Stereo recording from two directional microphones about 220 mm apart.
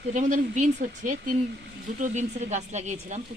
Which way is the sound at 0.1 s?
35° right (ahead or behind).